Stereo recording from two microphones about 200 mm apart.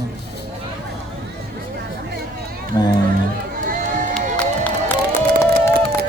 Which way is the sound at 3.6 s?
40° right (ahead or behind).